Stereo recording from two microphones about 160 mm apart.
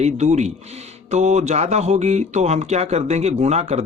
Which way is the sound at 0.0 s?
45° right (ahead or behind).